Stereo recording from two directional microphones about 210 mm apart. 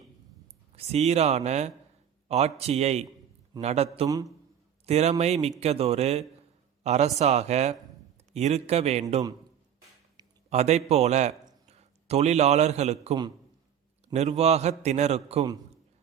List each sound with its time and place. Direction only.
0.8 s a man's voice: 30° right (ahead or behind)
4.0 s a man's voice: 15° right (ahead or behind)
4.9 s a man's voice: 30° right (ahead or behind)
10.2 s a sound: 20° right (ahead or behind)
10.5 s a man's voice: 30° right (ahead or behind)